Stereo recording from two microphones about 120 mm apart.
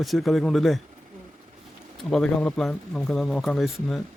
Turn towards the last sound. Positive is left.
turn(degrees=0)  # may be behind; listen again after turning